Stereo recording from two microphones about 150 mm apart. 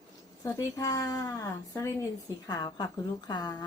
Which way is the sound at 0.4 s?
20° left (ahead or behind).